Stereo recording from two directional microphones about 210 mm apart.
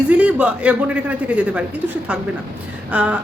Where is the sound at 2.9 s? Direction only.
5° right (ahead or behind).